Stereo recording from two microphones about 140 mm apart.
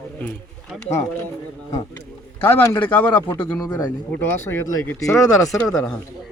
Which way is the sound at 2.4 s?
15° left (ahead or behind).